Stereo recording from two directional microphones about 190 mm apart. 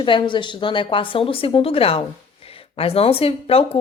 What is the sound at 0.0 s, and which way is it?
A woman's voice, 25° left (ahead or behind).